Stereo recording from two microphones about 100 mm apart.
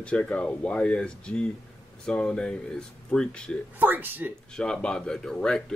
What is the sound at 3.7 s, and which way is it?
Speech, 20° right (ahead or behind).